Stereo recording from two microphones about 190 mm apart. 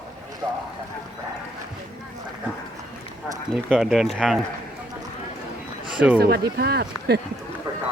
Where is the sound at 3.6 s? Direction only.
5° right (ahead or behind).